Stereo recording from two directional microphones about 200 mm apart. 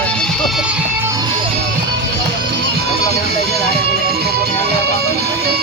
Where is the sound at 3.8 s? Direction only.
50° right (ahead or behind).